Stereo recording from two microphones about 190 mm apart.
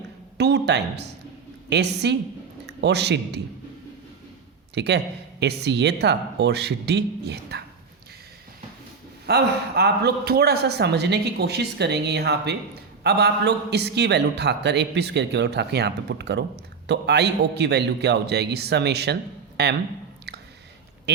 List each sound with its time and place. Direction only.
0.3 s a sound: 60° right (ahead or behind)
1.7 s a man's voice: 60° right (ahead or behind)
4.7 s a man's voice: 65° right (ahead or behind)
9.2 s a man's voice: 60° right (ahead or behind)